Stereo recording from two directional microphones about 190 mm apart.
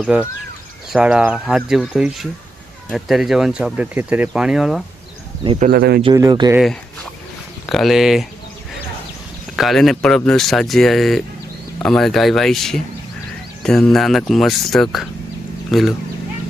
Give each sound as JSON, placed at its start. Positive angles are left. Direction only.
{"t": 0.0, "sound": "speech", "side_deg": -5}
{"t": 5.5, "sound": "speech", "side_deg": -50}
{"t": 6.1, "sound": "speech", "side_deg": -20}
{"t": 6.6, "sound": "speech", "side_deg": 0}
{"t": 9.6, "sound": "speech", "side_deg": 0}